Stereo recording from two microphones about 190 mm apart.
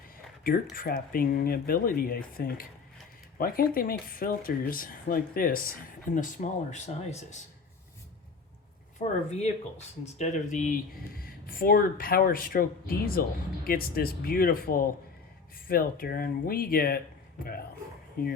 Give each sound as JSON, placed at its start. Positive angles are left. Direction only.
{"t": 0.4, "sound": "speech", "side_deg": 50}
{"t": 9.0, "sound": "speech", "side_deg": 35}
{"t": 18.2, "sound": "speech", "side_deg": 50}